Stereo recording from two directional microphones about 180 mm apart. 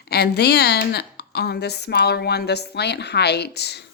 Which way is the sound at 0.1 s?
65° left (ahead or behind).